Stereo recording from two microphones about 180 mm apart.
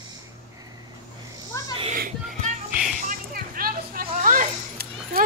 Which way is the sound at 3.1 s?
55° right (ahead or behind).